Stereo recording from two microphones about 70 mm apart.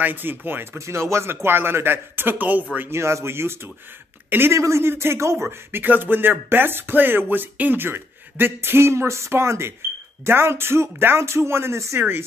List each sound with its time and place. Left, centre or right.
0.0 s speech: right
0.7 s speech: right
2.9 s speech: right
4.6 s speech: right
12.0 s speech: right